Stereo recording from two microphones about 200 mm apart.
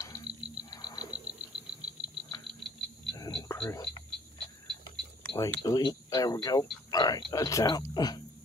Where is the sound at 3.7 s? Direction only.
20° left (ahead or behind).